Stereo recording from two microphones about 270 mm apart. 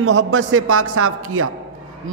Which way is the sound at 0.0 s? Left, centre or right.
Right.